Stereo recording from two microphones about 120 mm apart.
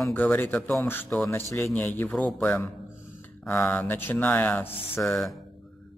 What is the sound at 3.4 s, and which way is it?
A man's voice, 15° left (ahead or behind).